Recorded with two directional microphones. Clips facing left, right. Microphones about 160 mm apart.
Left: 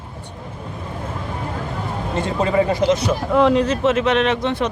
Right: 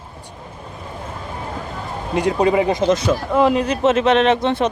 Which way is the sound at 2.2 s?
15° right (ahead or behind).